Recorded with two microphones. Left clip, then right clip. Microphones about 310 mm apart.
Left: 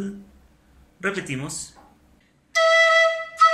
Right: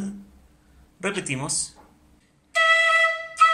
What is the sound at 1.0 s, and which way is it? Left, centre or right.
Music, centre.